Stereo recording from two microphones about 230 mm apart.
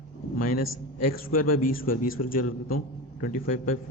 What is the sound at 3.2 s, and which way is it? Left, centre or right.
Speech, left.